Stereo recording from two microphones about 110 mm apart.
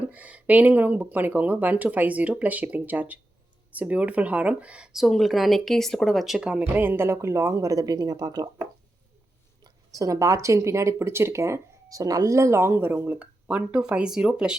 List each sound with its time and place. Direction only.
0.1 s speech: 15° right (ahead or behind); by 8.4 s 35° right (ahead or behind)
9.6 s speech: 30° right (ahead or behind); by 14.5 s 10° right (ahead or behind)